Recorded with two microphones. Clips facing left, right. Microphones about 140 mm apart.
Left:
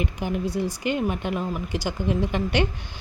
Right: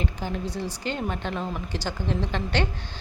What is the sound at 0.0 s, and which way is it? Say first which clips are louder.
Speech: left 3 dB; 15° left (ahead or behind).